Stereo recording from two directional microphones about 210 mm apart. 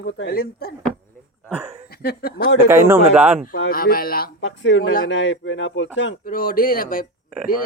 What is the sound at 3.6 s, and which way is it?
Speech, 45° left (ahead or behind).